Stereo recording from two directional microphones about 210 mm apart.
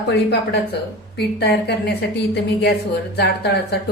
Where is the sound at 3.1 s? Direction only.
50° left (ahead or behind).